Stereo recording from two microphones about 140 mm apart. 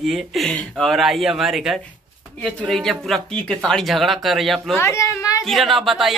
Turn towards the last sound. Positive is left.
turn(degrees=0)  # may be behind; listen again after turning